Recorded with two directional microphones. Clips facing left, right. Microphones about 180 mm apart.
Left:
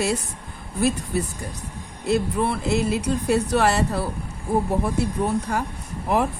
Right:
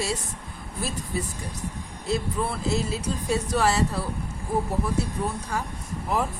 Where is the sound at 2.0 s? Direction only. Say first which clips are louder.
Left 5 dB; 65° left (ahead or behind).